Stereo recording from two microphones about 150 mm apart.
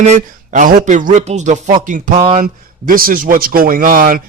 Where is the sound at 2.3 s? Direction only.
70° right (ahead or behind).